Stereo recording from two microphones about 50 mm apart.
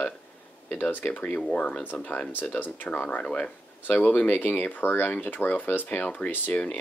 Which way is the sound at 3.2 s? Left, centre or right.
Left.